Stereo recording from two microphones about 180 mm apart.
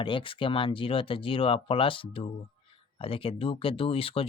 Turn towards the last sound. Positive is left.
turn(degrees=30)  # may be behind; listen again after turning